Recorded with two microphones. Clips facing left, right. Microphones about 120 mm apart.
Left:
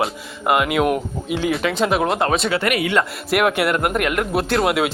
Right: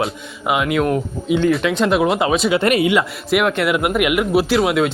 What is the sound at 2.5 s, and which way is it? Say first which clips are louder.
Speech: right 5 dB; 25° right (ahead or behind).